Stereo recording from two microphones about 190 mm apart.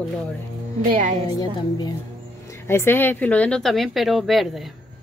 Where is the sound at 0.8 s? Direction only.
40° right (ahead or behind).